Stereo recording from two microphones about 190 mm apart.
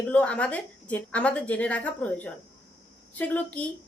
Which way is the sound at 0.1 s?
5° left (ahead or behind).